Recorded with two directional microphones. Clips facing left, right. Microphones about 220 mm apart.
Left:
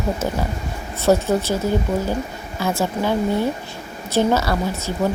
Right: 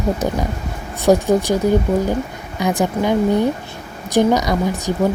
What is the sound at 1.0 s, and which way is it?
Speech, 15° right (ahead or behind).